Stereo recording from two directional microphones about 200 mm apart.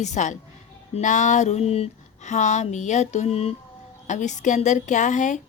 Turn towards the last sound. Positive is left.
turn(degrees=35)  # may be behind; listen again after turning